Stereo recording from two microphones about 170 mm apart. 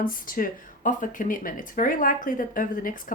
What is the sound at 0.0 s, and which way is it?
Speech, 55° left (ahead or behind).